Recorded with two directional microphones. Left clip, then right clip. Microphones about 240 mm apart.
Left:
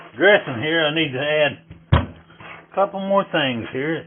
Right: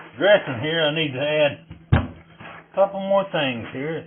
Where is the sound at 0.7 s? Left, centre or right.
Left.